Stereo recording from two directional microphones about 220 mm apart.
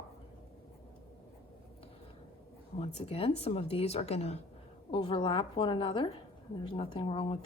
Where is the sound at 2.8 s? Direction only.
25° left (ahead or behind).